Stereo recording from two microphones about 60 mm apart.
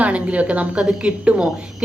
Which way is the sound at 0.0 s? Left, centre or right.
Right.